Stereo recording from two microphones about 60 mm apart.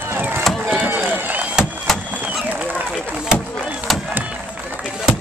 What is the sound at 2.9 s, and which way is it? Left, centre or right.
Chop, centre.